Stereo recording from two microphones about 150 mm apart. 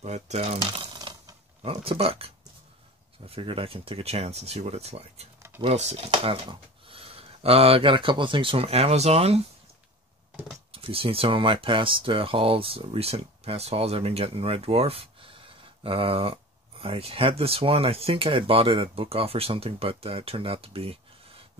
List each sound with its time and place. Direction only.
0.0 s speech: 45° right (ahead or behind)
0.7 s a sound: 30° right (ahead or behind)
1.7 s speech: 40° right (ahead or behind)
10.7 s speech: 40° right (ahead or behind)